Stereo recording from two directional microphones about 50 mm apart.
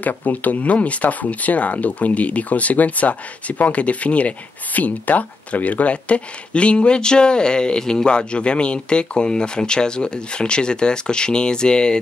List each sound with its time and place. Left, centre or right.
0.0 s speech: left; by 12.0 s centre